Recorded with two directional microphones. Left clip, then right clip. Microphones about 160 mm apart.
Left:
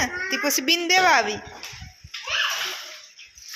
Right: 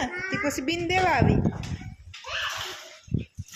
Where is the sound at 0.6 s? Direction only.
5° right (ahead or behind).